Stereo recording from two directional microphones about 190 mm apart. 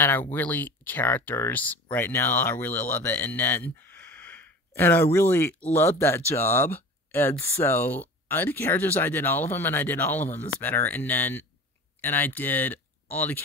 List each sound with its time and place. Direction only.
0.0 s speech: 10° left (ahead or behind)